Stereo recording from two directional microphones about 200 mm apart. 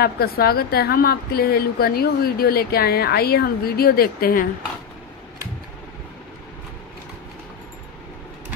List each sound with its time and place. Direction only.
0.0 s a woman's voice: 50° left (ahead or behind)